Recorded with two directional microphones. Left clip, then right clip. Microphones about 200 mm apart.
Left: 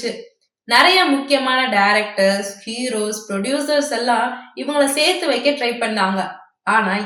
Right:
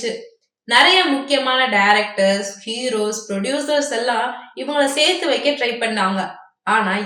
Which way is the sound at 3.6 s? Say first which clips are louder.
Left 1 dB; 5° right (ahead or behind).